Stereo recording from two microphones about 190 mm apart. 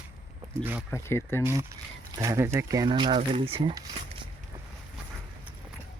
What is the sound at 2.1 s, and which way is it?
Speech, 15° right (ahead or behind).